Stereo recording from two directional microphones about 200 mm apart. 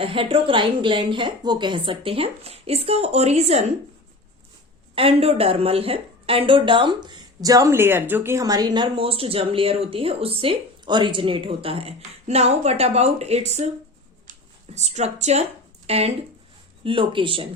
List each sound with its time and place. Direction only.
0.0 s speech: 25° right (ahead or behind)
4.9 s speech: 30° right (ahead or behind)
14.8 s a woman's voice: 35° right (ahead or behind)